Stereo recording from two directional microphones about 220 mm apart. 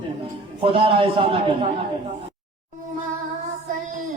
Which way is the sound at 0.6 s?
25° right (ahead or behind).